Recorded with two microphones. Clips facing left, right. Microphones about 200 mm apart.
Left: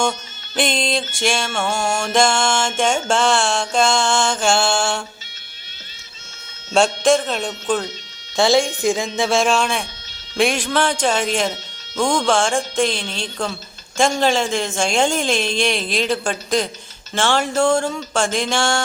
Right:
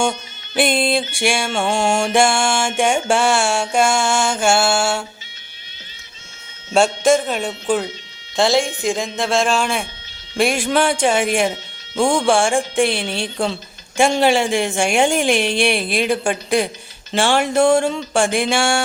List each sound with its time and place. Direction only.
0.0 s mantra: 10° right (ahead or behind)
1.7 s mantra: 30° right (ahead or behind)
2.0 s mantra: 15° right (ahead or behind)
6.7 s mantra: 5° right (ahead or behind)
8.4 s speech: centre (ahead or behind)
10.3 s mantra: 5° right (ahead or behind)